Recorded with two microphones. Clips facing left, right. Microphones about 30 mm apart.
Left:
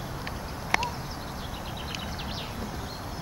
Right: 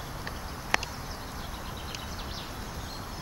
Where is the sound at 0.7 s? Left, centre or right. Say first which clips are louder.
Left 3 dB; centre.